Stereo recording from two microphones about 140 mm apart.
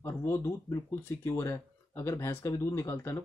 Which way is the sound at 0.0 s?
20° left (ahead or behind).